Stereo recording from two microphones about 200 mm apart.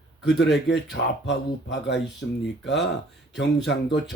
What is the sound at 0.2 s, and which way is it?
Speech, 60° left (ahead or behind).